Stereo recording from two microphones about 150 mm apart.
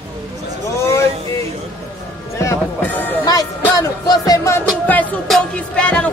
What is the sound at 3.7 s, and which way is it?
Music, 25° left (ahead or behind).